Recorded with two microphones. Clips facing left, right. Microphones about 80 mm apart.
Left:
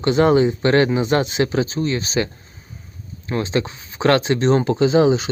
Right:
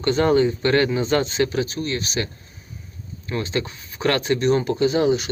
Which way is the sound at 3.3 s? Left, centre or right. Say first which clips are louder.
Left 4 dB; left.